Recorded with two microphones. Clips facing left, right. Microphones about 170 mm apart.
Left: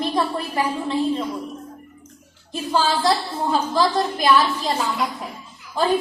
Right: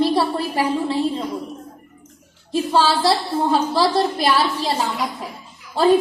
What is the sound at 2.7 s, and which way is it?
A woman's voice, 30° right (ahead or behind).